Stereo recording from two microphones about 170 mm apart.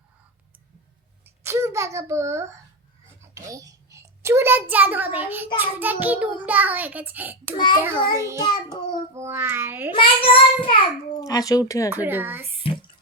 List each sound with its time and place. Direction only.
1.2 s speech: 15° right (ahead or behind)
3.3 s babbling: 20° right (ahead or behind)
4.2 s a child's voice: 15° right (ahead or behind)
4.7 s child singing: 10° right (ahead or behind)
7.5 s child singing: 25° left (ahead or behind)
8.1 s child singing: 15° right (ahead or behind)
8.4 s child singing: 25° left (ahead or behind)
9.1 s child singing: 15° right (ahead or behind)
9.9 s child singing: 30° left (ahead or behind)
11.2 s speech: 20° left (ahead or behind)
11.9 s child singing: 10° right (ahead or behind)